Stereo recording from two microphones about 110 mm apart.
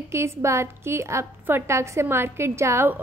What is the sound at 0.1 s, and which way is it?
A woman's voice, 25° right (ahead or behind).